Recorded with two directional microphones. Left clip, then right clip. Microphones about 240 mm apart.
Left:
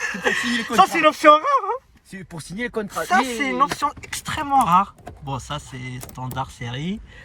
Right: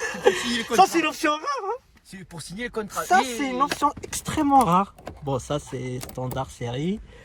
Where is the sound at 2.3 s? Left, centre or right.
Left.